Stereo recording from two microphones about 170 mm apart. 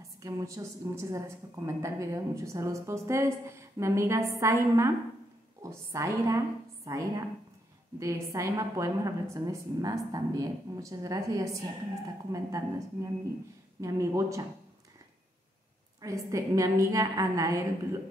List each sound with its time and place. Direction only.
0.0 s a woman's voice: 20° right (ahead or behind)
16.0 s a woman's voice: 20° right (ahead or behind)